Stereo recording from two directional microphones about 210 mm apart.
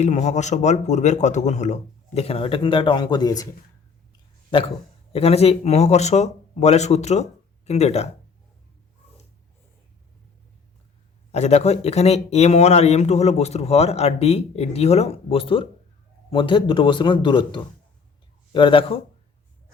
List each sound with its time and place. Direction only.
0.0 s speech: 35° left (ahead or behind); by 3.4 s 20° left (ahead or behind)
4.5 s a man's voice: 25° left (ahead or behind)
11.3 s a man's voice: 30° left (ahead or behind)